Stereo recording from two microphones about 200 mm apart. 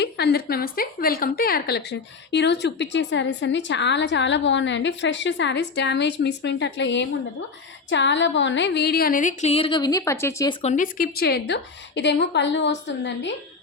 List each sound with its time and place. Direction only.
0.0 s a woman's voice: 55° left (ahead or behind); by 10.5 s 15° left (ahead or behind)
10.6 s a woman's voice: 35° left (ahead or behind); by 13.3 s 65° left (ahead or behind)